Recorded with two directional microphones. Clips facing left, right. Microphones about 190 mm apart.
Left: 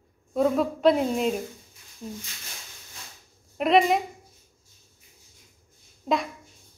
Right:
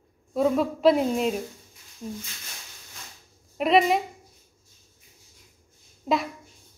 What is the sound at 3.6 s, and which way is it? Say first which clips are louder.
Speech: even; centre (ahead or behind).